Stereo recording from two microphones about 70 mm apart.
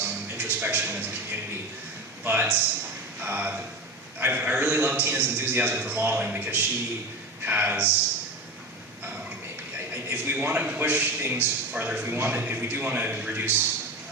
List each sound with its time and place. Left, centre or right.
0.0 s music: right
2.2 s a man's voice: right
9.7 s a man's voice: right